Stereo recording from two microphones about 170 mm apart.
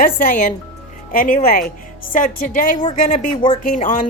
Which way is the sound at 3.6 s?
50° left (ahead or behind).